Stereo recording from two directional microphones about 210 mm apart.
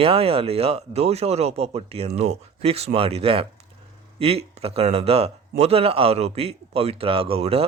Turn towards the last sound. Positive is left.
turn(degrees=-30)  # may be behind; listen again after turning